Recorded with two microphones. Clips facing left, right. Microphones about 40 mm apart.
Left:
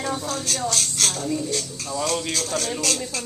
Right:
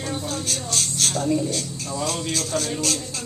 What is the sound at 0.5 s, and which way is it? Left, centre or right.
Speech, left.